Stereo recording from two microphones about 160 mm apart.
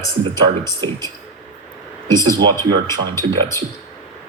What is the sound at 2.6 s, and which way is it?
Speech, 15° left (ahead or behind).